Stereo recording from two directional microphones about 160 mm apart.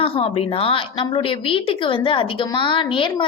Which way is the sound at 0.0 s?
35° left (ahead or behind).